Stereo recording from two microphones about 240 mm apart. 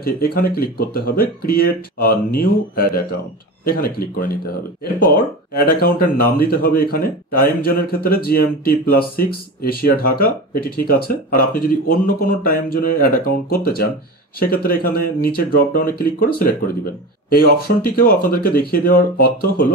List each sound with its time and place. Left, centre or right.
0.0 s speech: left
17.3 s speech: left